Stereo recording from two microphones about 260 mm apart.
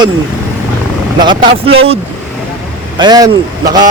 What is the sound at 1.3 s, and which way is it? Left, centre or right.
Speech, right.